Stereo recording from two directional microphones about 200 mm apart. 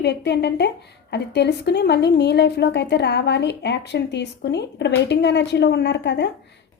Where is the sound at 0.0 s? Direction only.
55° left (ahead or behind).